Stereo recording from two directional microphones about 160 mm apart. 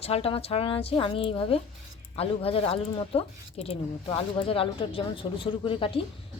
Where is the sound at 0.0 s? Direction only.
40° left (ahead or behind).